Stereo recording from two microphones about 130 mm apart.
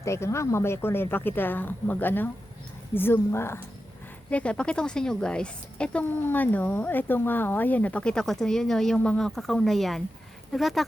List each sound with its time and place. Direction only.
0.0 s a woman's voice: 20° left (ahead or behind); by 10.8 s centre (ahead or behind)